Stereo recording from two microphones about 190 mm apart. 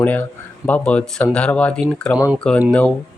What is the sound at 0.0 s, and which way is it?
Speech, 10° left (ahead or behind).